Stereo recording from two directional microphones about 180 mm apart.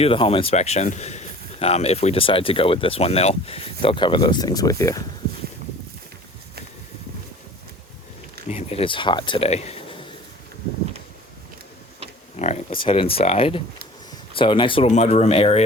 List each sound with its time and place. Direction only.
0.0 s speech: 30° left (ahead or behind)
8.4 s speech: 35° left (ahead or behind)
12.4 s speech: 35° left (ahead or behind)